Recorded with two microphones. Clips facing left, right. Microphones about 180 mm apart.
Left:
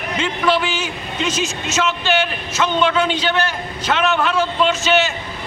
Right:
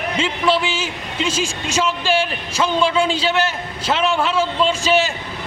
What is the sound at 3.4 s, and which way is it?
A man's voice, 30° right (ahead or behind).